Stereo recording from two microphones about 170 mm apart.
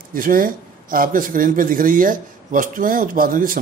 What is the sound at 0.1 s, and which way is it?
Speech, 55° right (ahead or behind).